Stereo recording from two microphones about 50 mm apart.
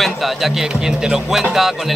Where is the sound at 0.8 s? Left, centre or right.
Centre.